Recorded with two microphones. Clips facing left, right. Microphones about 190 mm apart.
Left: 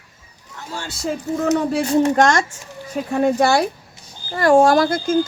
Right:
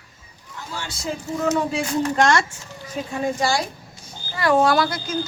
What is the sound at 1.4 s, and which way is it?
Speech, 45° left (ahead or behind).